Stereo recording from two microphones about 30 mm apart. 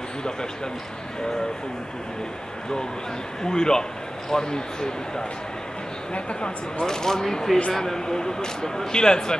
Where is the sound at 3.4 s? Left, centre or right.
Left.